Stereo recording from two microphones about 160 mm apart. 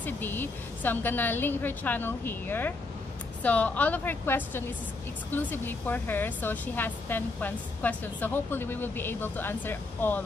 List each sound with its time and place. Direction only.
0.0 s speech: 10° left (ahead or behind)